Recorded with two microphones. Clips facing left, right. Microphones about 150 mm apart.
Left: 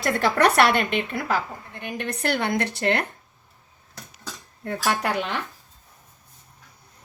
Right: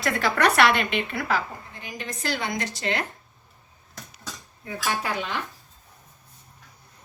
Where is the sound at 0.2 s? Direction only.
50° left (ahead or behind).